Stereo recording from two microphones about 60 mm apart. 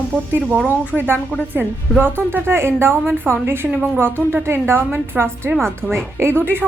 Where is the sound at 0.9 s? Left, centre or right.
Right.